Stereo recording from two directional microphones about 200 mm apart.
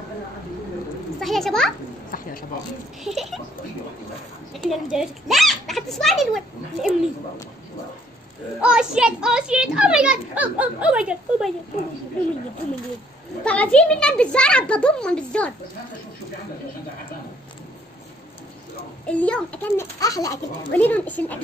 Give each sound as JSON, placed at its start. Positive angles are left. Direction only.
{"t": 1.2, "sound": "a child's voice", "side_deg": 0}
{"t": 2.0, "sound": "a sound", "side_deg": 45}
{"t": 3.0, "sound": "a child's voice", "side_deg": 0}
{"t": 4.6, "sound": "a child's voice", "side_deg": 0}
{"t": 8.5, "sound": "a child's voice", "side_deg": -5}
{"t": 13.4, "sound": "a child's voice", "side_deg": 5}
{"t": 19.0, "sound": "a child's voice", "side_deg": 5}
{"t": 20.0, "sound": "a child's voice", "side_deg": 15}